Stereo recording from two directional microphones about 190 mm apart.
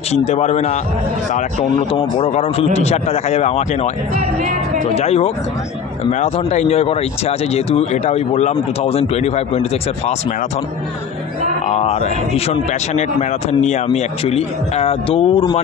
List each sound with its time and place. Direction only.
0.1 s speech: 35° left (ahead or behind)
4.9 s speech: 35° left (ahead or behind)
11.6 s speech: 35° left (ahead or behind)